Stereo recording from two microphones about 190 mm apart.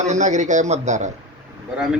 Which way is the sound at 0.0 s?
40° right (ahead or behind).